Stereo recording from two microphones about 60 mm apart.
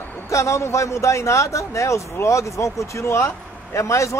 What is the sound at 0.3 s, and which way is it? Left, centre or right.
Speech, left.